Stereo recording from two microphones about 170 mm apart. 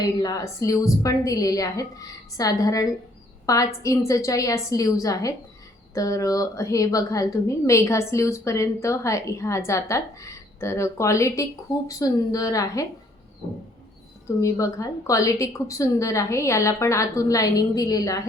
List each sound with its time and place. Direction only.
0.0 s a woman's voice: 20° left (ahead or behind)
14.4 s a woman's voice: 20° left (ahead or behind)